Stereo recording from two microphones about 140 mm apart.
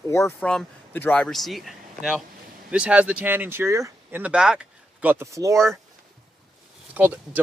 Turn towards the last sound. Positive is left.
turn(degrees=-10)  # may be behind; listen again after turning